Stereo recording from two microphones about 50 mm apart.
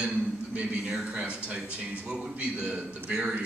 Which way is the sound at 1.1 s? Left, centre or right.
Right.